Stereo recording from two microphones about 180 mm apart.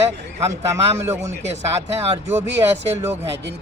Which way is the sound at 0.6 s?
15° right (ahead or behind).